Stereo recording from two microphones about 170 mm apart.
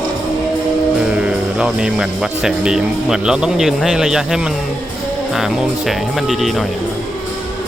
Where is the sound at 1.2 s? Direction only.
5° right (ahead or behind).